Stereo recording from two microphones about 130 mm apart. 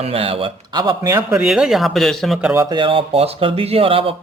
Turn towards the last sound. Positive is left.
turn(degrees=-45)  # may be behind; listen again after turning